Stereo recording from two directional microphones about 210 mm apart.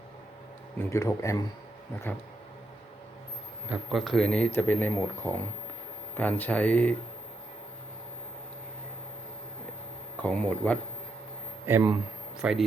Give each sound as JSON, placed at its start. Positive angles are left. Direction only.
{"t": 0.8, "sound": "speech", "side_deg": 10}
{"t": 3.7, "sound": "speech", "side_deg": 0}
{"t": 10.2, "sound": "speech", "side_deg": 5}
{"t": 11.6, "sound": "speech", "side_deg": -10}